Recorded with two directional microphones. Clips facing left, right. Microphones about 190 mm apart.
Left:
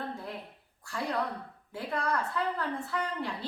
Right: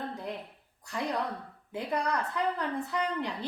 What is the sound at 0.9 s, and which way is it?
A woman's voice, 20° right (ahead or behind).